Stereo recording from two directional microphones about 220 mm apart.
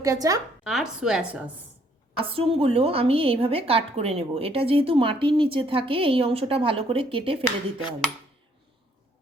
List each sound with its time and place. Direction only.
0.0 s a woman's voice: 15° right (ahead or behind)
0.6 s a woman's voice: 5° right (ahead or behind)
2.1 s a woman's voice: 25° right (ahead or behind)